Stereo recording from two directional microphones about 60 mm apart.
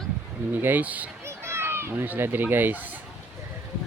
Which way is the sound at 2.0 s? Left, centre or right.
Right.